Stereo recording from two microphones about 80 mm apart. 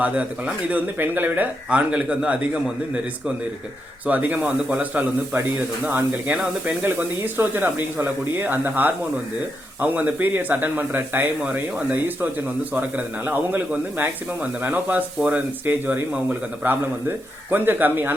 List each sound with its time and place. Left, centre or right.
0.0 s speech: centre
4.0 s speech: centre